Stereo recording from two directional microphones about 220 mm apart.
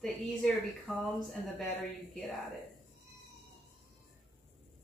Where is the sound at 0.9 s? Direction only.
Centre (ahead or behind).